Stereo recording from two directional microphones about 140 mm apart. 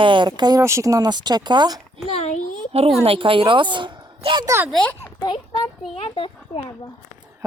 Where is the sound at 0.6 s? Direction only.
20° right (ahead or behind).